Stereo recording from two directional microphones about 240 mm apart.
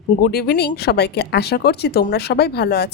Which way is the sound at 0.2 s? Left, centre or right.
Left.